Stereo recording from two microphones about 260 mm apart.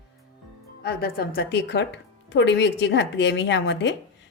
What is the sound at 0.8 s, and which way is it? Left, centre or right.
A woman's voice, left.